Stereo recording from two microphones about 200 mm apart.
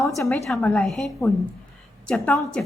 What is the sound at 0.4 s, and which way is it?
A woman's voice, 5° left (ahead or behind).